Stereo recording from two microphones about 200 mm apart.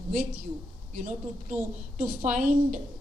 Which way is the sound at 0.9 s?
40° right (ahead or behind).